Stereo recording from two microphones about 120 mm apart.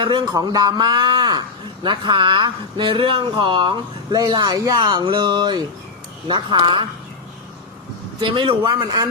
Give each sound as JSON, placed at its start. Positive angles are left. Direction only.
{"t": 0.0, "sound": "a man's voice", "side_deg": -40}
{"t": 8.2, "sound": "a man's voice", "side_deg": -45}